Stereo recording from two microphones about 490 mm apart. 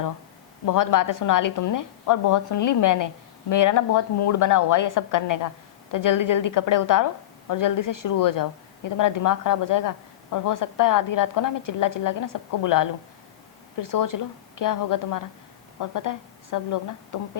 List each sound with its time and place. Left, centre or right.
0.6 s a woman's voice: left